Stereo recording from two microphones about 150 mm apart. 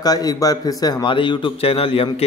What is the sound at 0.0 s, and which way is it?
A man's voice, 25° left (ahead or behind).